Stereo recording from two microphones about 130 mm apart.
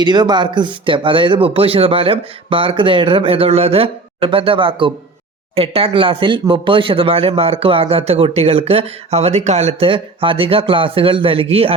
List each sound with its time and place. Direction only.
0.0 s speech: 35° right (ahead or behind); by 9.9 s 60° right (ahead or behind)
9.9 s speech: 40° right (ahead or behind)